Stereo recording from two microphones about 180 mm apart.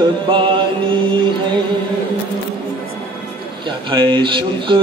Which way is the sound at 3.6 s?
25° right (ahead or behind).